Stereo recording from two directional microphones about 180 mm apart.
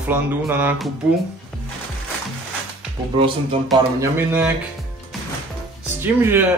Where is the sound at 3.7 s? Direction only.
15° right (ahead or behind).